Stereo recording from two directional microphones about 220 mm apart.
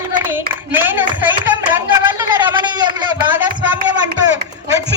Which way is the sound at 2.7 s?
20° right (ahead or behind).